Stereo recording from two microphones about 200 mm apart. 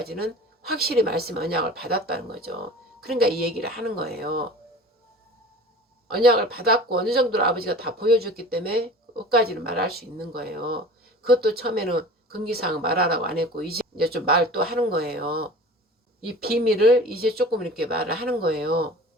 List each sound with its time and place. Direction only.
0.0 s speech: 50° right (ahead or behind)
6.1 s speech: 50° right (ahead or behind)